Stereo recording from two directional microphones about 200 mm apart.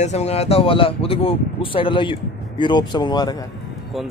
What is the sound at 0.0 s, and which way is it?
A man's voice, 35° left (ahead or behind).